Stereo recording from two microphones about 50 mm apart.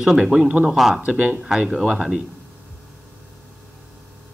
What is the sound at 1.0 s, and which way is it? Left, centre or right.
Speech, right.